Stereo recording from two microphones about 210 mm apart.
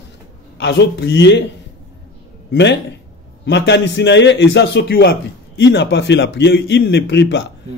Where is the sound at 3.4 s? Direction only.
55° left (ahead or behind).